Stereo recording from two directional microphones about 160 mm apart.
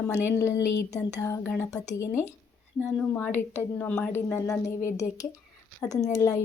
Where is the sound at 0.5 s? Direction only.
90° left.